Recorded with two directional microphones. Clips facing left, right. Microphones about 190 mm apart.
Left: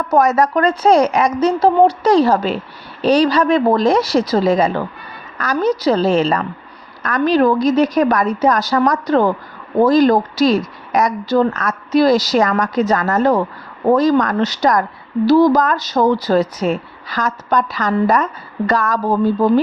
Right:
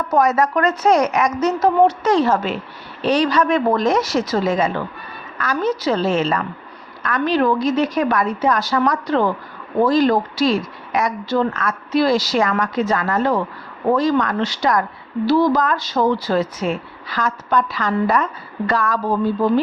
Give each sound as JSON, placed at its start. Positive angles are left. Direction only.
{"t": 0.1, "sound": "speech", "side_deg": 45}